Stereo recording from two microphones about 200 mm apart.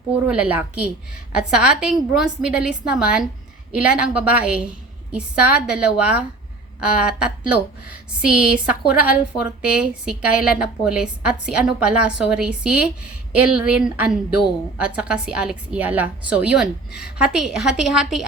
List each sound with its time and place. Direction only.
0.3 s a woman's voice: 5° right (ahead or behind)